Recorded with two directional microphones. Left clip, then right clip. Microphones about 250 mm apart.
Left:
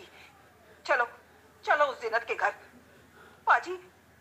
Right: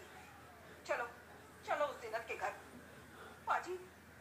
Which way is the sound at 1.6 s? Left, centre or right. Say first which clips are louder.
Left 13 dB; left.